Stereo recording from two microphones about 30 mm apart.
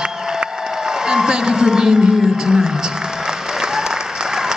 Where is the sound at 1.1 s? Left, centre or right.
Right.